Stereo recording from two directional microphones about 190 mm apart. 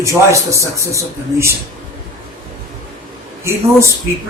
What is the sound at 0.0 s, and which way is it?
A man's voice, 15° right (ahead or behind).